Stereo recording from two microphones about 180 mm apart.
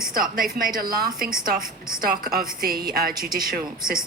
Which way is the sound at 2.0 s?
60° right (ahead or behind).